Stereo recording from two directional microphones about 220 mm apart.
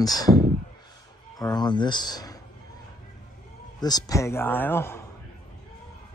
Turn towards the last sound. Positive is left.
turn(degrees=10)  # may be behind; listen again after turning